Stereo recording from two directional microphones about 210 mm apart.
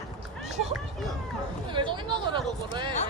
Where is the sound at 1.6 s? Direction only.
25° right (ahead or behind).